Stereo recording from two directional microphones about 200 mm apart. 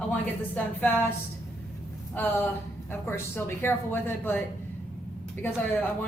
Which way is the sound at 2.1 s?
10° left (ahead or behind).